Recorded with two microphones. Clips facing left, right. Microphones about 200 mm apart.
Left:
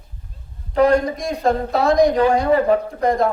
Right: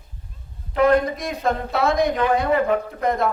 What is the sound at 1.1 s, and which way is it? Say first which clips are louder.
Speech: left 4 dB; centre (ahead or behind).